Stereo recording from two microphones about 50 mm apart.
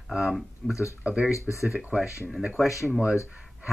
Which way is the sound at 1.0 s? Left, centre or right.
Right.